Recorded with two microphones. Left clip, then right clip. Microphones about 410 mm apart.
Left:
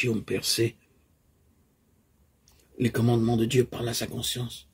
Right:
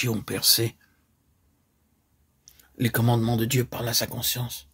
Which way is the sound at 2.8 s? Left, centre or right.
Right.